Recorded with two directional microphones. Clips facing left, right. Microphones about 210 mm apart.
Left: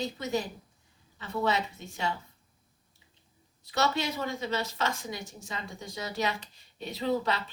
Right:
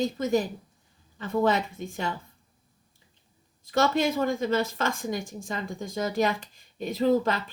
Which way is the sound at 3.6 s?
50° right (ahead or behind).